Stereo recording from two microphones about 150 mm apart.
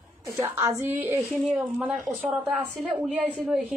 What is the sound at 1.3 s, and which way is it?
A woman's voice, centre (ahead or behind).